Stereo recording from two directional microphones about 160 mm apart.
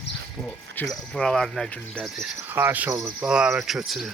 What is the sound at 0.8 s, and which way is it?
Speech, 10° left (ahead or behind).